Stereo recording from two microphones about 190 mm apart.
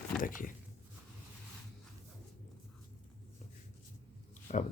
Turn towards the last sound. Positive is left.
turn(degrees=40)  # may be behind; listen again after turning